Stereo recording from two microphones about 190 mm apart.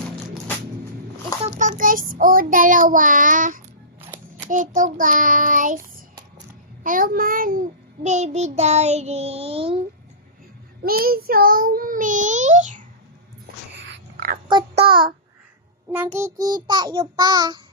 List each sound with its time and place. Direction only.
1.4 s child singing: 40° right (ahead or behind)
10.8 s a child's voice: 50° right (ahead or behind)
13.7 s whispering: 50° right (ahead or behind)
14.4 s child singing: 25° right (ahead or behind)
16.1 s child singing: 15° right (ahead or behind)